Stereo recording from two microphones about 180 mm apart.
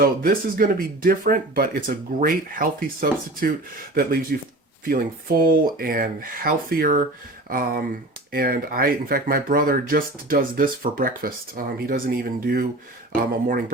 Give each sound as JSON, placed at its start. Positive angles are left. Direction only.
{"t": 0.0, "sound": "speech", "side_deg": -55}